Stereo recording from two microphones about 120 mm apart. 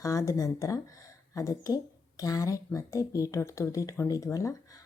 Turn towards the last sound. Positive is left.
turn(degrees=30)  # may be behind; listen again after turning